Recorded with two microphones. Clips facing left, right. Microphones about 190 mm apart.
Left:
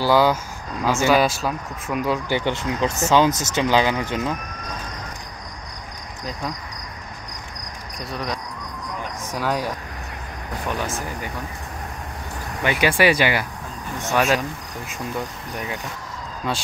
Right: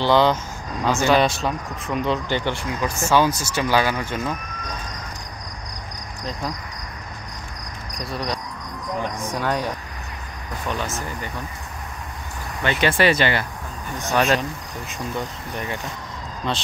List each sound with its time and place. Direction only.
0.0 s speech: 5° left (ahead or behind)
8.0 s cricket: centre (ahead or behind)
9.2 s speech: 5° left (ahead or behind)
12.6 s speech: 10° left (ahead or behind)
16.5 s speech: 5° left (ahead or behind)